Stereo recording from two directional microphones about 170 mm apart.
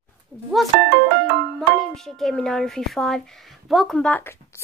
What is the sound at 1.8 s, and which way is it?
A woman's voice, centre (ahead or behind).